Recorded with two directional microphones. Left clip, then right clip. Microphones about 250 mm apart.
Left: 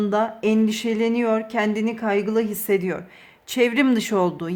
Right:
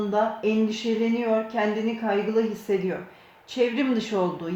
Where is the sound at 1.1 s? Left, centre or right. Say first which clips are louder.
Left 3 dB; left.